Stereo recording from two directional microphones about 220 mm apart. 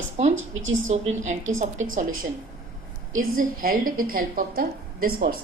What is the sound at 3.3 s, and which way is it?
A woman's voice, 40° right (ahead or behind).